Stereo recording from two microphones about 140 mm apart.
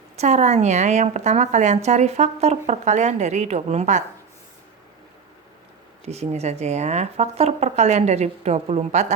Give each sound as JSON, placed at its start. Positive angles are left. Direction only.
{"t": 0.2, "sound": "a woman's voice", "side_deg": -55}
{"t": 6.1, "sound": "speech", "side_deg": -50}